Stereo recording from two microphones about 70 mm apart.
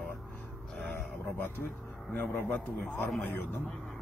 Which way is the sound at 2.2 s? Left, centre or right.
Left.